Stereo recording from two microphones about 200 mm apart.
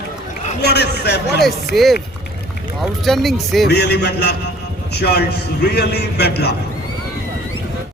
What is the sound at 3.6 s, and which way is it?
A man's voice, 55° left (ahead or behind).